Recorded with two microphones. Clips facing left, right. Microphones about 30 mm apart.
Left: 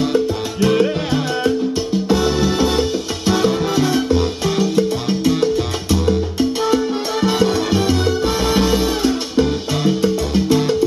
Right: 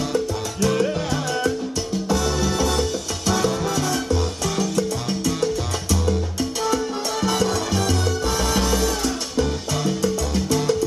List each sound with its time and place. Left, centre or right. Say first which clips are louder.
0.1 s salsa music: left 6 dB; left
2.0 s music: left 5 dB; left
6.7 s salsa music: left 5 dB; left
8.5 s music: left 5 dB; left